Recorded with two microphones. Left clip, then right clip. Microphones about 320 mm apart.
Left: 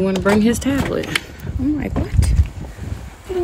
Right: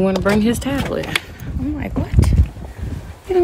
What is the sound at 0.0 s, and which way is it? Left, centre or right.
Speech, centre.